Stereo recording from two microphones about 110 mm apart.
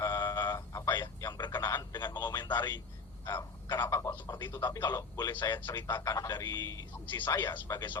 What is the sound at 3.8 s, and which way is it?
A man's voice, 30° left (ahead or behind).